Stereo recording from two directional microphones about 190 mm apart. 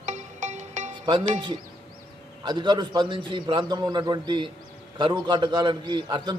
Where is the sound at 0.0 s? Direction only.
40° right (ahead or behind).